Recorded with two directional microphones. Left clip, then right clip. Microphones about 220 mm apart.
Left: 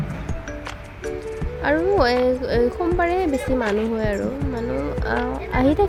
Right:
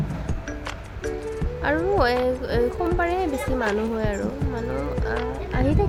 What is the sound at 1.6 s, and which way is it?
A woman's voice, 10° left (ahead or behind).